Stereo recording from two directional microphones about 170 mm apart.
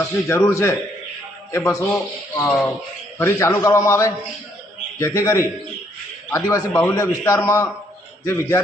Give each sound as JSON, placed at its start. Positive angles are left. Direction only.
{"t": 0.0, "sound": "a man's voice", "side_deg": 15}